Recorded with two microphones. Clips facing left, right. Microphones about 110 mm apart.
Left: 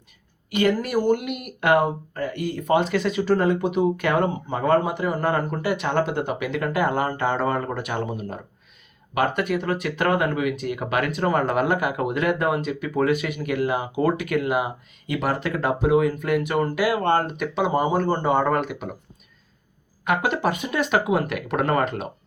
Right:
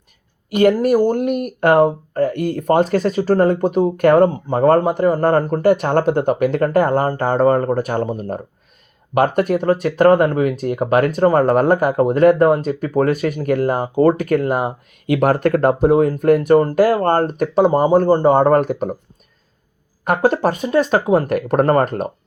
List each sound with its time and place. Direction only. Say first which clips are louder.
0.5 s speech: right 8 dB; 45° right (ahead or behind)
20.1 s speech: right 6 dB; 40° right (ahead or behind)